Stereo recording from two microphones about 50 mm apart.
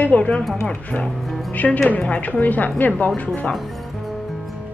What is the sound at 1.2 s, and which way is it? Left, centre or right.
Speech, centre.